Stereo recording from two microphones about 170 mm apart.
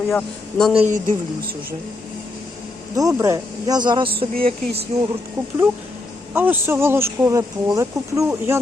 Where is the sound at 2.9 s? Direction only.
20° right (ahead or behind).